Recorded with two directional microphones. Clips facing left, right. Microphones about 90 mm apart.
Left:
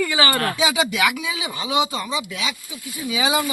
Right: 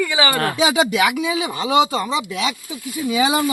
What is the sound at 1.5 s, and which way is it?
Speech, 50° right (ahead or behind).